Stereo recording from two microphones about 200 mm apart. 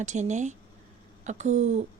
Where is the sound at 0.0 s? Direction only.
35° right (ahead or behind).